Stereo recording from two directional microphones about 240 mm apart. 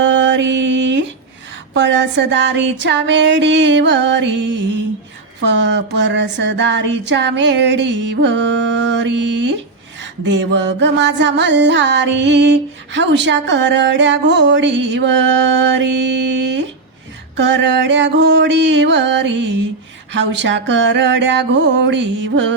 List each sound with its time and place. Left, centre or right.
0.0 s mantra: right
1.7 s music: right